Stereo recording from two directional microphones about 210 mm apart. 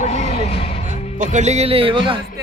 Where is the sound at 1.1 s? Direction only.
35° right (ahead or behind).